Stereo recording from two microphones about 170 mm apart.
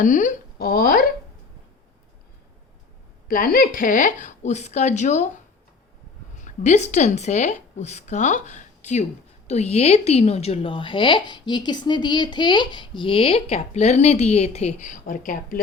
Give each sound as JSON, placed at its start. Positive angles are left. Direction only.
{"t": 0.0, "sound": "speech", "side_deg": 50}
{"t": 3.2, "sound": "speech", "side_deg": 55}
{"t": 6.3, "sound": "a woman's voice", "side_deg": 45}